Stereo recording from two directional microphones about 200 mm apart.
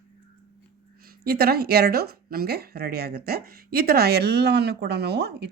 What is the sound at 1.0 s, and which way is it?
Speech, 50° right (ahead or behind).